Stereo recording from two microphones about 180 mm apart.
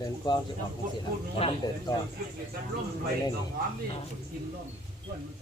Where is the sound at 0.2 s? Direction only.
25° left (ahead or behind).